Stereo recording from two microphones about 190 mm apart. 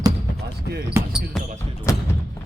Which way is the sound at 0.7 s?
55° right (ahead or behind).